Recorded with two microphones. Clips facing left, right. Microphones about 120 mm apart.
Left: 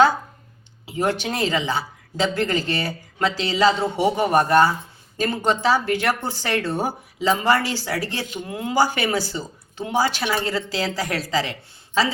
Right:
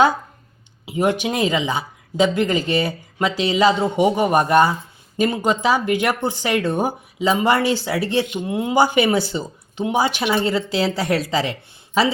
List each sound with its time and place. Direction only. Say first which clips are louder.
0.9 s speech: right 3 dB; 15° right (ahead or behind)